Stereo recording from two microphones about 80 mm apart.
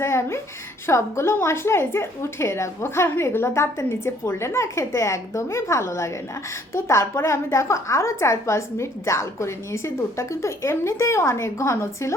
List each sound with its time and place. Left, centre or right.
0.0 s a woman's voice: left